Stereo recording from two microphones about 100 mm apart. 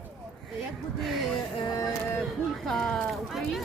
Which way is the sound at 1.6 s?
35° left (ahead or behind).